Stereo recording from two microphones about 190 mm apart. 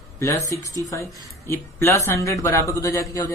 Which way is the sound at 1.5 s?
15° left (ahead or behind).